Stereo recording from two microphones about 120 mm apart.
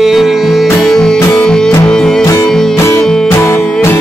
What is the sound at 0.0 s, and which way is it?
Music, centre (ahead or behind).